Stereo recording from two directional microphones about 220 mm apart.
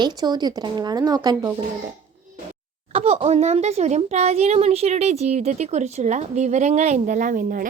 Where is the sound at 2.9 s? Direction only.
25° right (ahead or behind).